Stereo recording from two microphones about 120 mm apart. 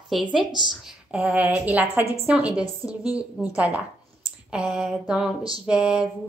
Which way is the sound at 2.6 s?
30° left (ahead or behind).